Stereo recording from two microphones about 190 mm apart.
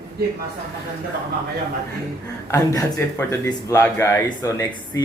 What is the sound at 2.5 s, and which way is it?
A man's voice, 15° left (ahead or behind).